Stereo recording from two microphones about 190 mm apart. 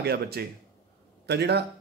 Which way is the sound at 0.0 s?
55° right (ahead or behind).